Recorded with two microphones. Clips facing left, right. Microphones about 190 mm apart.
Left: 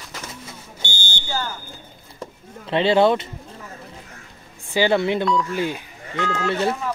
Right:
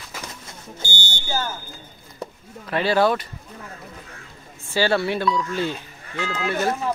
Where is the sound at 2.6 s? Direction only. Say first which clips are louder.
Left 3 dB; 25° left (ahead or behind).